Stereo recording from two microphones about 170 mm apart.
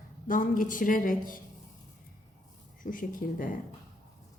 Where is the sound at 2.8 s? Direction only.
55° left (ahead or behind).